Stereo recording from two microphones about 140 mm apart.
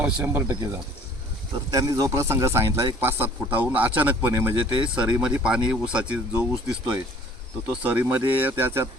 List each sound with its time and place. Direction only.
0.0 s speech: 15° right (ahead or behind)
1.7 s speech: 25° right (ahead or behind)